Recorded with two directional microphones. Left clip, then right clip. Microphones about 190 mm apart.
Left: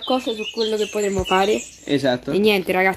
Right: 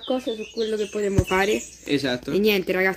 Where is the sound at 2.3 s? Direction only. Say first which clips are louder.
Left 2 dB; centre (ahead or behind).